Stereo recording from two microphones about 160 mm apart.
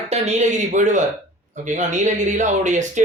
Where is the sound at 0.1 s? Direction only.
45° right (ahead or behind).